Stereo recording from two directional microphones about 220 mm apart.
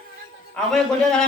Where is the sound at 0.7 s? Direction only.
Centre (ahead or behind).